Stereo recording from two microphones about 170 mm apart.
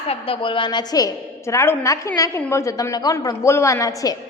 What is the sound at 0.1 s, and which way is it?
A woman's voice, 30° left (ahead or behind).